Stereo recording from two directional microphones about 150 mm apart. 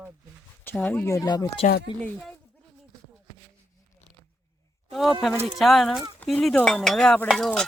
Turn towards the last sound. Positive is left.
turn(degrees=5)  # may be behind; listen again after turning